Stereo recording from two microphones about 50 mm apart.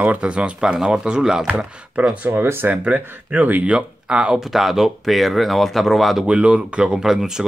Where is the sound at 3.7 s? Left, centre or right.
Centre.